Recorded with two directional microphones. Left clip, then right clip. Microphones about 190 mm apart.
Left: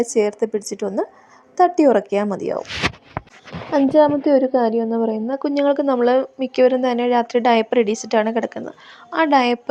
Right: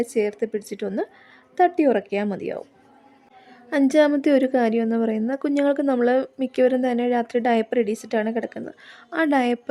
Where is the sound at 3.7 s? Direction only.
15° right (ahead or behind).